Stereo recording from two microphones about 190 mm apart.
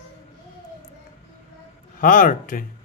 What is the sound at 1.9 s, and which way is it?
Speech, 45° left (ahead or behind).